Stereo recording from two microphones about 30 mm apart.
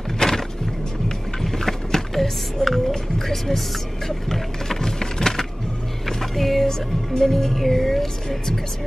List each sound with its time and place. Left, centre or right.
0.2 s music: centre
1.4 s vehicle: centre
2.0 s music: centre
2.9 s speech: centre
4.3 s a sound: centre
6.0 s music: centre
7.2 s speech: centre